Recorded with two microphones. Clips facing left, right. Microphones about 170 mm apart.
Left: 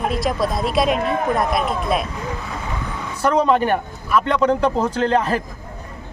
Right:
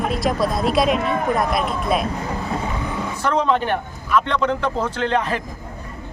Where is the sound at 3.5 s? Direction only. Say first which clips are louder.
Left 3 dB; 45° left (ahead or behind).